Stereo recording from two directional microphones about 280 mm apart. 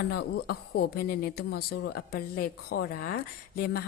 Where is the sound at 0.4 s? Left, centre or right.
Left.